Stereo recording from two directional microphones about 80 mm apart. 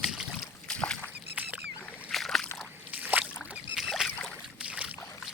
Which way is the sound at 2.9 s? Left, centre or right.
Right.